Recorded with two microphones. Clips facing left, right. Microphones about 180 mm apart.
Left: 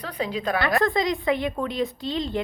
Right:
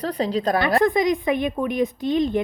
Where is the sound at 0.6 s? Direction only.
20° right (ahead or behind).